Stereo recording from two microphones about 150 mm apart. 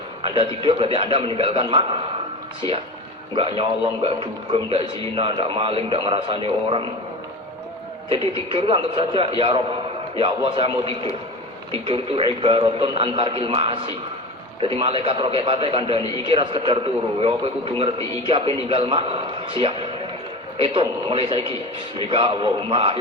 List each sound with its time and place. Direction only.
0.2 s a man's voice: 35° right (ahead or behind)
8.1 s a man's voice: 35° right (ahead or behind)